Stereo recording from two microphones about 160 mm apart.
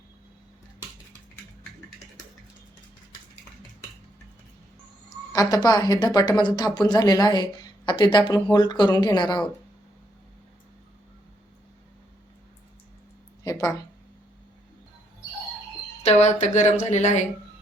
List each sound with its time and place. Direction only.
5.0 s a woman's voice: 25° left (ahead or behind)
13.4 s a sound: 20° left (ahead or behind)
16.0 s speech: 45° left (ahead or behind)